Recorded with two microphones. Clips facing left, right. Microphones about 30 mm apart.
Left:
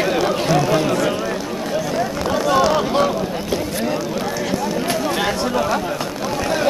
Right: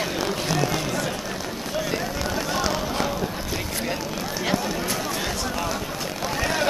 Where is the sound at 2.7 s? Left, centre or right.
Left.